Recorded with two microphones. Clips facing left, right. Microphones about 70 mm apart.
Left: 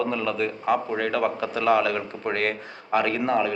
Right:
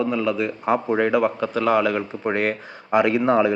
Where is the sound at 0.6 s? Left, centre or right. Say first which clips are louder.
Right 5 dB; right.